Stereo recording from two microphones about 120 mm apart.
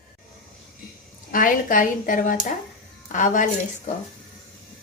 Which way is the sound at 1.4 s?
90° left.